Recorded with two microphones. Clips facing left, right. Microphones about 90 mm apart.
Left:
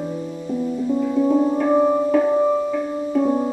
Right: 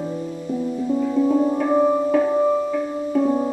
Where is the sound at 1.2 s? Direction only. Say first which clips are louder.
Left 2 dB; 5° left (ahead or behind).